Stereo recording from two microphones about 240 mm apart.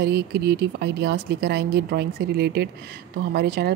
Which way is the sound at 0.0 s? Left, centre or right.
Right.